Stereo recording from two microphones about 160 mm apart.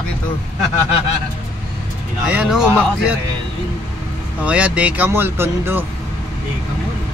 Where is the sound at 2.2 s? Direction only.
5° right (ahead or behind).